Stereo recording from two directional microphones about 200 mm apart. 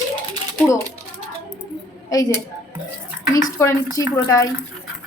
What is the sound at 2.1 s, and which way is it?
Speech, 15° left (ahead or behind).